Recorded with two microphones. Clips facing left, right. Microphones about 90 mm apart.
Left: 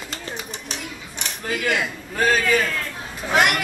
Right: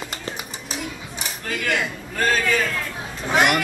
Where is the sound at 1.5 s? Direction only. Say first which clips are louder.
Left 1 dB; 5° left (ahead or behind).